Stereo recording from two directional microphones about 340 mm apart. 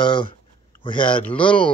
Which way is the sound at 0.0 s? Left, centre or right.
Centre.